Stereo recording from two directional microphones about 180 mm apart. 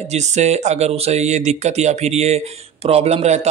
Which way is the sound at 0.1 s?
40° right (ahead or behind).